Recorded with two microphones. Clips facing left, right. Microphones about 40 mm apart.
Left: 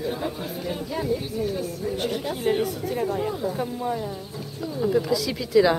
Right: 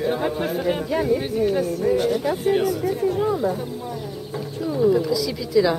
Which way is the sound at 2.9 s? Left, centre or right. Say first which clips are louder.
Right 5 dB; left.